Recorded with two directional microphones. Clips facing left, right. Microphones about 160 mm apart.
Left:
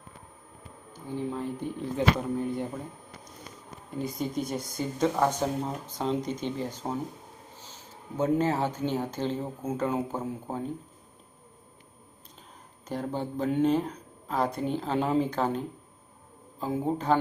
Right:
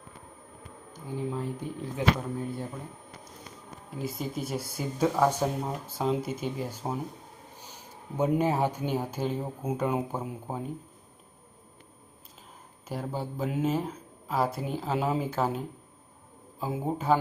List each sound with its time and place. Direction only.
0.9 s speech: 10° right (ahead or behind)
3.9 s speech: 5° right (ahead or behind)
12.9 s speech: 5° right (ahead or behind)